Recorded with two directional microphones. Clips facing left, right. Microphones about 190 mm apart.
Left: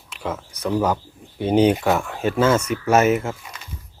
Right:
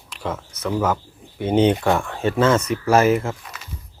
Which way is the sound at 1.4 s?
25° right (ahead or behind).